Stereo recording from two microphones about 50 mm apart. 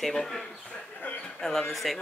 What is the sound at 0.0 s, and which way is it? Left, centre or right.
Speech, centre.